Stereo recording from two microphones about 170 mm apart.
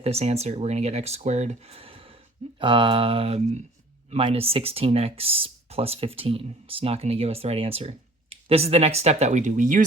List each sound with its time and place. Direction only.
0.0 s speech: 40° right (ahead or behind)